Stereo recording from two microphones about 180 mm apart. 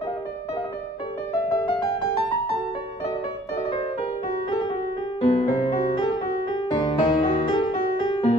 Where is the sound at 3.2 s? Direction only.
35° left (ahead or behind).